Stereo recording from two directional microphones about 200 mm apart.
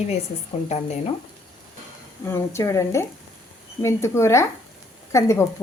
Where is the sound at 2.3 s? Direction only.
15° left (ahead or behind).